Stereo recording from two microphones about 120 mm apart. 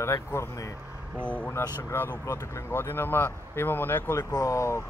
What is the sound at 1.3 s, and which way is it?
Speech, 10° left (ahead or behind).